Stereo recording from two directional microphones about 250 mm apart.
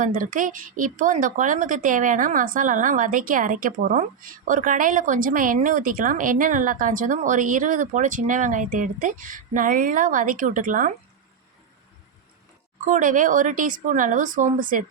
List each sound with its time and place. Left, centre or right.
0.0 s a woman's voice: right
12.8 s a woman's voice: right